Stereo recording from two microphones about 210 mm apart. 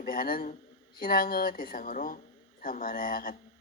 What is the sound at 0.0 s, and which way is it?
Speech, 45° left (ahead or behind).